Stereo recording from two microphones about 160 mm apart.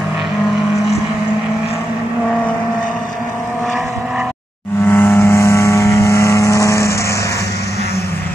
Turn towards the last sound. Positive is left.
turn(degrees=20)  # may be behind; listen again after turning